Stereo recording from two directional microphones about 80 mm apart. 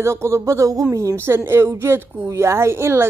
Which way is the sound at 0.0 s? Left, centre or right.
Right.